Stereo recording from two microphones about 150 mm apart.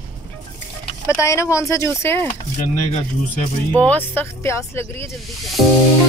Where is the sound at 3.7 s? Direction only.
10° left (ahead or behind).